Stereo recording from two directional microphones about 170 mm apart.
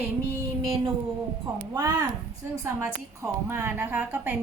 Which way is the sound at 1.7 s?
20° right (ahead or behind).